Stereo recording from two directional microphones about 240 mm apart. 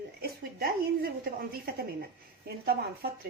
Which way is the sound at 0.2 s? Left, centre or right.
Right.